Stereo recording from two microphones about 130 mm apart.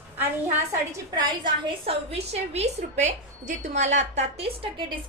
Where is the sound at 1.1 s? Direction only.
35° right (ahead or behind).